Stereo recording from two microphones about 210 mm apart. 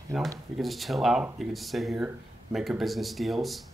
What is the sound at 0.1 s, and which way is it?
Speech, centre (ahead or behind).